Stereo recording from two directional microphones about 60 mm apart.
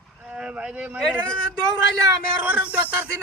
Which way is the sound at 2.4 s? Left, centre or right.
Right.